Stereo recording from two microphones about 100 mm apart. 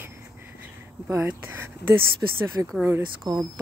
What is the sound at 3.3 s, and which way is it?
Speech, 45° right (ahead or behind).